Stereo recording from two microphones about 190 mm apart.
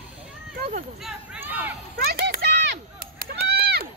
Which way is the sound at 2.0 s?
55° right (ahead or behind).